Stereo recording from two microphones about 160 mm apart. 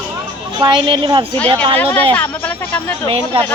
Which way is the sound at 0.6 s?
30° right (ahead or behind).